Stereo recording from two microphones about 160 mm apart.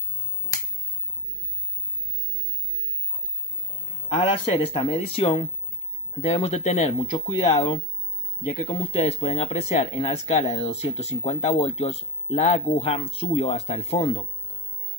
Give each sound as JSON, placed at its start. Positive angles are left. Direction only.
{"t": 4.1, "sound": "speech", "side_deg": 35}
{"t": 8.5, "sound": "speech", "side_deg": 50}